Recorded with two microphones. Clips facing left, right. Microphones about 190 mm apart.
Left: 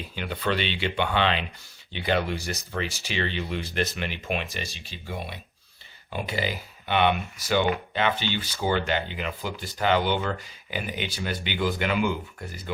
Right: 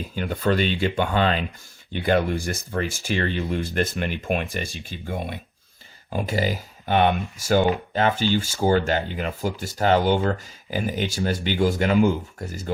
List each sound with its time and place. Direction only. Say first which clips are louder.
0.2 s speech: right 5 dB; 45° right (ahead or behind)